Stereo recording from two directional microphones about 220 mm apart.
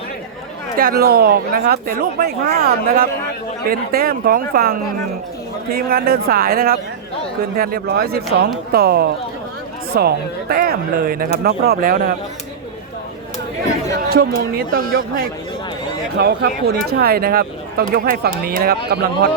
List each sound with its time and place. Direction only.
0.8 s speech: 45° right (ahead or behind)
14.1 s speech: 45° right (ahead or behind)